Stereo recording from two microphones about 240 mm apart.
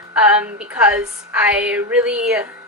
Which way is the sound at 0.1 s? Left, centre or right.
Centre.